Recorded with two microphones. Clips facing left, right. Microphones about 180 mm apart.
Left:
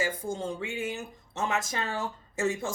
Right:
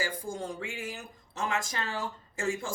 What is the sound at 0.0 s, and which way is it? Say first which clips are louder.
Speech: left 3 dB; 25° left (ahead or behind).